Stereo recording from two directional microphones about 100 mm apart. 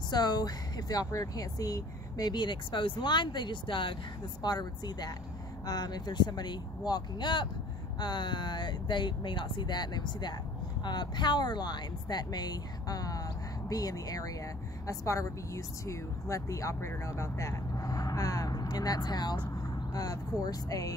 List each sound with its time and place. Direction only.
0.1 s speech: 45° left (ahead or behind)